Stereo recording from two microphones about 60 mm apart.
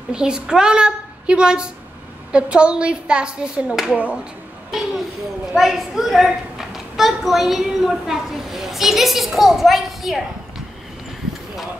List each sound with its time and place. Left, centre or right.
0.1 s a child's voice: centre
4.6 s a woman's voice: centre